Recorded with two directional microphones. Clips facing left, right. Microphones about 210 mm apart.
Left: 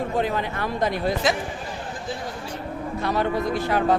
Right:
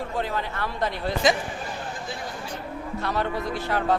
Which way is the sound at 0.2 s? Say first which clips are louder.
Left 2 dB; 15° left (ahead or behind).